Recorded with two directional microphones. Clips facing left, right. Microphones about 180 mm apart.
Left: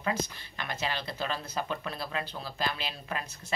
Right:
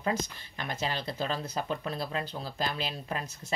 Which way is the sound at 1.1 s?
20° right (ahead or behind).